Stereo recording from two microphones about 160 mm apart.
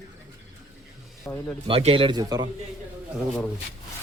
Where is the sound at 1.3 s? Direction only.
15° left (ahead or behind).